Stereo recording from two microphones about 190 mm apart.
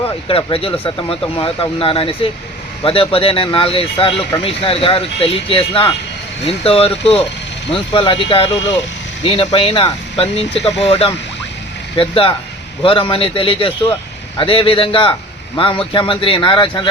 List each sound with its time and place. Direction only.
0.3 s speech: 30° left (ahead or behind)